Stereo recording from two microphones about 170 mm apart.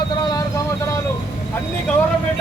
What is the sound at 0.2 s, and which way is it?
Vehicle, 25° left (ahead or behind).